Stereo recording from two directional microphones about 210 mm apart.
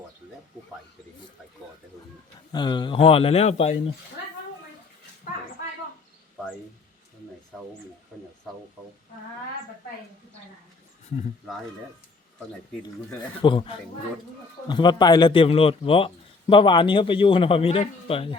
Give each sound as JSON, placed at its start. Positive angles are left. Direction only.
{"t": 2.5, "sound": "a man's voice", "side_deg": 20}
{"t": 12.8, "sound": "a man's voice", "side_deg": 20}